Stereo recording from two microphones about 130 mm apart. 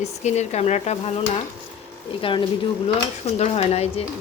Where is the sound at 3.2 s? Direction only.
55° left (ahead or behind).